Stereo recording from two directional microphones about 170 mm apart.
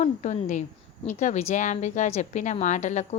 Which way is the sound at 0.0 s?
45° left (ahead or behind).